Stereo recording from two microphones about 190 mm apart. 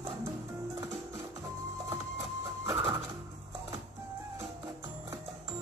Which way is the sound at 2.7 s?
30° right (ahead or behind).